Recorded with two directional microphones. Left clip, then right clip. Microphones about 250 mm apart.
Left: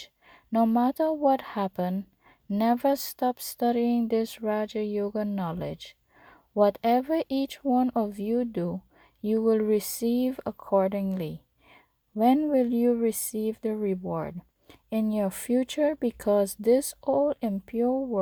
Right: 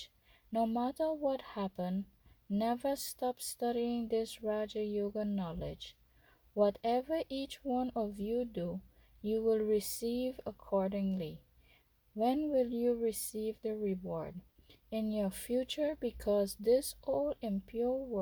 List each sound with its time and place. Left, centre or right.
0.5 s speech: left